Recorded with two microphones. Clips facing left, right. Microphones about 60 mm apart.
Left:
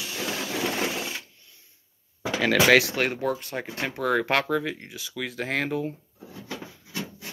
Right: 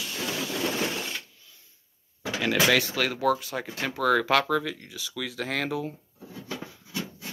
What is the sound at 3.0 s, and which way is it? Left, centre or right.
Speech, left.